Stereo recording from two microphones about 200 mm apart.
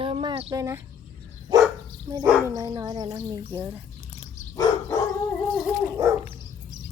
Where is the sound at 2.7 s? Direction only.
20° right (ahead or behind).